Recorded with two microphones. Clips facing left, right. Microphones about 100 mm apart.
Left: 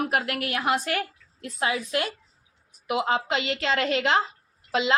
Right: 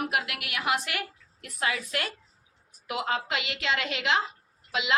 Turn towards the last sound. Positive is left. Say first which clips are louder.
# left 4 dB
turn(degrees=35)  # may be behind; listen again after turning